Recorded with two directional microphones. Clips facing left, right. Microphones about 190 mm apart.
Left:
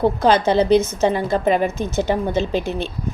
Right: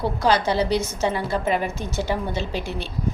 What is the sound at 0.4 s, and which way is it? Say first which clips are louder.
A woman's voice: left 7 dB; 20° left (ahead or behind).